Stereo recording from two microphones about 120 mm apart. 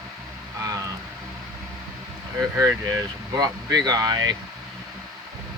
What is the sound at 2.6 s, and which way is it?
Speech, 30° right (ahead or behind).